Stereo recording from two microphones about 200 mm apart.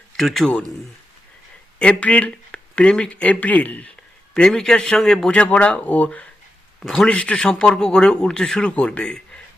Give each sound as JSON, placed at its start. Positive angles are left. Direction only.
{"t": 0.2, "sound": "a man's voice", "side_deg": 0}
{"t": 1.8, "sound": "a man's voice", "side_deg": 5}